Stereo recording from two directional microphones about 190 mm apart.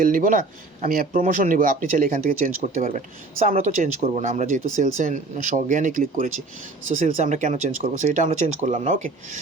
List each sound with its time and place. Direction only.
0.0 s speech: 45° right (ahead or behind)